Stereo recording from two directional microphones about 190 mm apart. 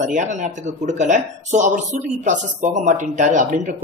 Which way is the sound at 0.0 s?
40° right (ahead or behind).